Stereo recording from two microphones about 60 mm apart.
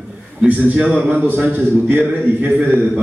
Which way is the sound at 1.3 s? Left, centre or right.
Right.